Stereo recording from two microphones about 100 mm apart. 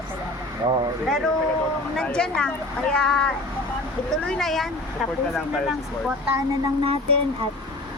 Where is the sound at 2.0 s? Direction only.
10° left (ahead or behind).